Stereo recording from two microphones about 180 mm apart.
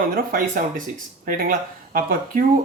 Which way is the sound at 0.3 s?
50° right (ahead or behind).